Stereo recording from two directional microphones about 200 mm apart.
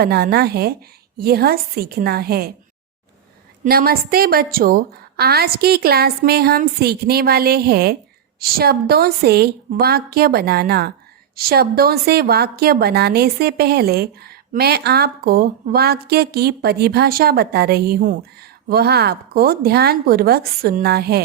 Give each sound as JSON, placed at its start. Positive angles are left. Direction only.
{"t": 0.0, "sound": "a woman's voice", "side_deg": -50}
{"t": 3.6, "sound": "a woman's voice", "side_deg": -50}